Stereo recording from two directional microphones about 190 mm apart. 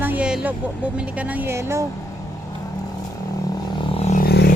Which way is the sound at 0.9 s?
5° right (ahead or behind).